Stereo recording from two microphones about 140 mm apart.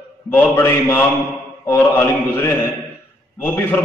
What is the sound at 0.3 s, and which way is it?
A man's voice, 15° left (ahead or behind).